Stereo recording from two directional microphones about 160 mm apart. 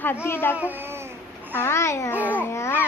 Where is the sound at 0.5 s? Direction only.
10° right (ahead or behind).